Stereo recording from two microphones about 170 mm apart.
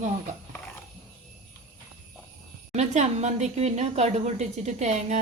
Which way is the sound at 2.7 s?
40° right (ahead or behind).